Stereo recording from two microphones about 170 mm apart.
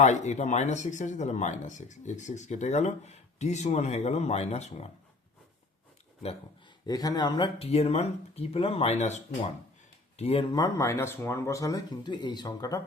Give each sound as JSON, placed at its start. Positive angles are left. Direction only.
{"t": 0.0, "sound": "speech", "side_deg": 45}
{"t": 6.8, "sound": "speech", "side_deg": 20}
{"t": 10.5, "sound": "speech", "side_deg": 20}